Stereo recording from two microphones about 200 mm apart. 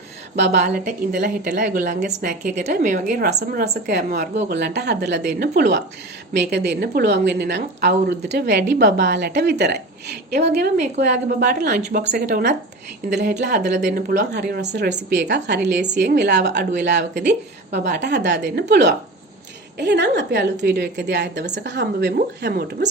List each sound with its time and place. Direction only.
0.3 s a woman's voice: 55° right (ahead or behind)
1.1 s a woman's voice: 40° right (ahead or behind); by 13.6 s 55° right (ahead or behind)
13.7 s a woman's voice: 40° right (ahead or behind)